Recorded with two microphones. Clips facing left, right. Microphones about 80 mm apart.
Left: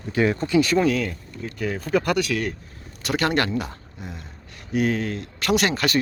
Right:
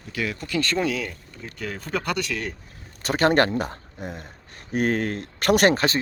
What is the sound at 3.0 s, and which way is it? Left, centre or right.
Speech, right.